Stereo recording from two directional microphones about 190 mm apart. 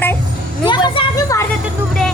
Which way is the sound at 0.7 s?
25° left (ahead or behind).